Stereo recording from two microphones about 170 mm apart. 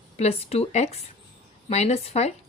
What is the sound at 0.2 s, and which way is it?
A woman's voice, 35° left (ahead or behind).